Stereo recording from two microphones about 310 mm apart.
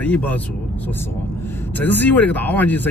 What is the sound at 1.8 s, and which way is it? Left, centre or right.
Speech, centre.